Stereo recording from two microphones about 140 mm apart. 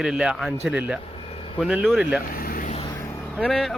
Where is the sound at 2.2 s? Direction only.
90° left.